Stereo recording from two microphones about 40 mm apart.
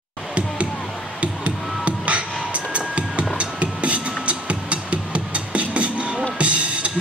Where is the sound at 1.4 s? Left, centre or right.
Right.